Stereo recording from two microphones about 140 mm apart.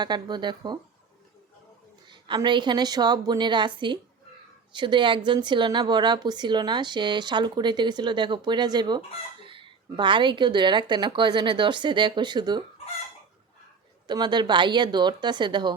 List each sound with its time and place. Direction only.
0.0 s speech: 30° right (ahead or behind)
2.0 s speech: 35° right (ahead or behind)
14.1 s speech: 30° right (ahead or behind)